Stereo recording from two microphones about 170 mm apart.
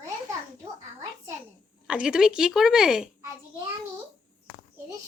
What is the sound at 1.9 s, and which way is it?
A woman's voice, 5° right (ahead or behind).